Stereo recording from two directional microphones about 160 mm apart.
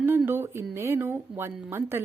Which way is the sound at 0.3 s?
15° right (ahead or behind).